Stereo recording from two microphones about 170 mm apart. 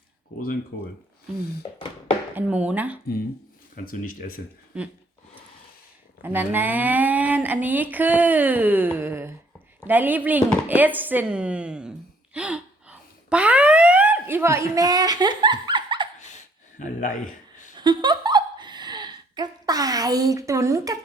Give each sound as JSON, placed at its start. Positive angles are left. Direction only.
{"t": 0.7, "sound": "speech", "side_deg": 70}
{"t": 2.3, "sound": "speech", "side_deg": -10}
{"t": 3.8, "sound": "speech", "side_deg": 50}
{"t": 6.2, "sound": "speech", "side_deg": -10}
{"t": 10.7, "sound": "gasp", "side_deg": -10}
{"t": 16.7, "sound": "speech", "side_deg": 50}
{"t": 17.7, "sound": "laughter", "side_deg": -25}